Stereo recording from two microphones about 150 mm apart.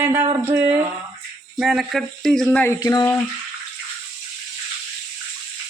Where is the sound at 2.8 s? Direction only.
25° left (ahead or behind).